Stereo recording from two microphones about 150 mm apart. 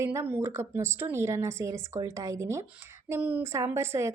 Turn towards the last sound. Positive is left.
turn(degrees=-20)  # may be behind; listen again after turning